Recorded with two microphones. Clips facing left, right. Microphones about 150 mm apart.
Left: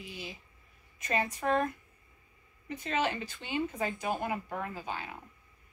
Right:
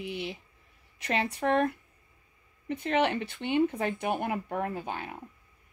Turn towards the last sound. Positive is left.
turn(degrees=-55)  # may be behind; listen again after turning